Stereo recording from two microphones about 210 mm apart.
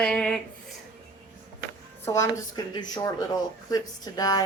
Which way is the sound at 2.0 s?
15° left (ahead or behind).